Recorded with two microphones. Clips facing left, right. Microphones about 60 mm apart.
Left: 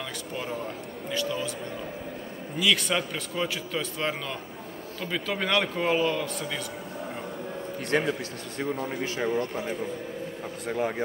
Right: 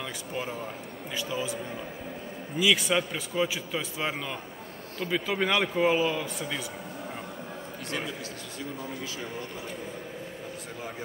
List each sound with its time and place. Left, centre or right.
0.4 s a man's voice: centre
2.5 s a man's voice: centre
7.9 s a man's voice: left